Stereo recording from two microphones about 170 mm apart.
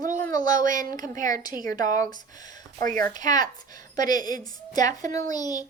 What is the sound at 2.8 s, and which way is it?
Speech, 50° right (ahead or behind).